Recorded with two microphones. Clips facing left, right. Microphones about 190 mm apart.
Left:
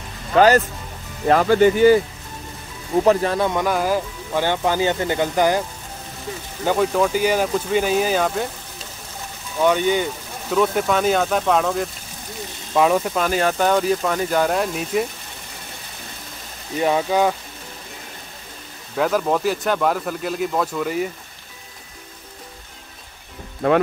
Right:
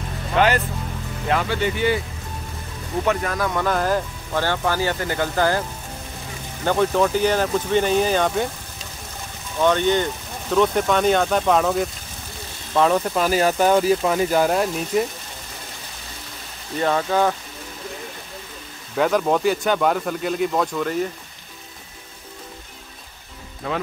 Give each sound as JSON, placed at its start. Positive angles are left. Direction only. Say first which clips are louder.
{"t": 1.3, "sound": "speech", "louder": "left 8 dB", "side_deg": 45}
{"t": 3.0, "sound": "speech", "louder": "left 5 dB", "side_deg": 35}
{"t": 3.6, "sound": "speech", "louder": "left 1 dB", "side_deg": 10}
{"t": 6.6, "sound": "speech", "louder": "even", "side_deg": 5}
{"t": 9.6, "sound": "speech", "louder": "even", "side_deg": 10}
{"t": 16.7, "sound": "speech", "louder": "left 1 dB", "side_deg": 10}
{"t": 18.9, "sound": "speech", "louder": "right 1 dB", "side_deg": 0}
{"t": 23.6, "sound": "speech", "louder": "left 10 dB", "side_deg": 60}